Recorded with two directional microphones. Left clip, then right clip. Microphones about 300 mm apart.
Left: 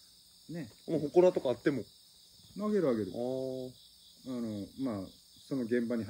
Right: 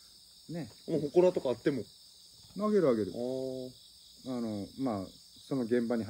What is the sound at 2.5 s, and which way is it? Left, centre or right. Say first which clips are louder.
Speech: right 3 dB; centre.